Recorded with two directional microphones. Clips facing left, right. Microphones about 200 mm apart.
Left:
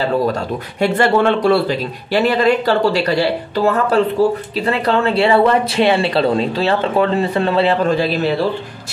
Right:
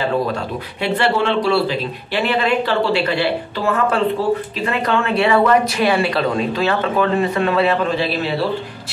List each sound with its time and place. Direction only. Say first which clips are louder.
0.3 s speech: left 3 dB; 45° left (ahead or behind)